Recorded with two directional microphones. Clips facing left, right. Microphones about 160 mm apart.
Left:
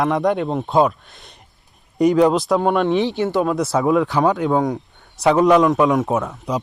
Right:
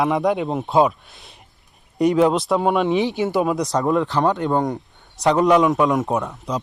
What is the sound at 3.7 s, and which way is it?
Speech, 5° left (ahead or behind).